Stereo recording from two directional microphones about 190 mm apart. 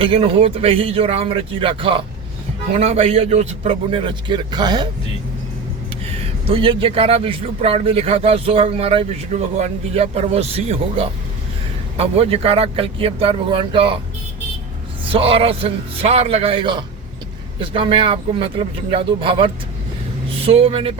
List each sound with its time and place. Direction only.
0.0 s a man's voice: 30° right (ahead or behind)
6.5 s speech: 30° right (ahead or behind)
15.0 s a man's voice: 30° right (ahead or behind)